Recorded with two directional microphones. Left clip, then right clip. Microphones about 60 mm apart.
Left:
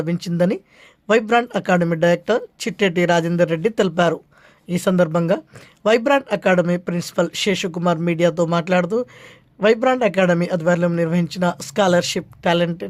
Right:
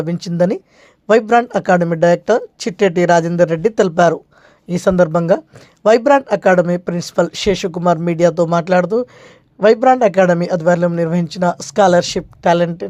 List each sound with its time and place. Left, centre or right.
0.0 s speech: right